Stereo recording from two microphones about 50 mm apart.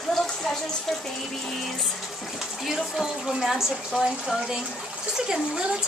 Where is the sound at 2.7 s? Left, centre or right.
Centre.